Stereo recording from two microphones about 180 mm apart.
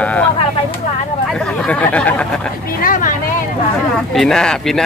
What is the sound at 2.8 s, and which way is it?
Speech, 50° left (ahead or behind).